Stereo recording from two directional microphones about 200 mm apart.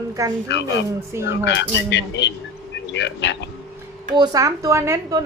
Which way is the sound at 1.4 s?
60° left (ahead or behind).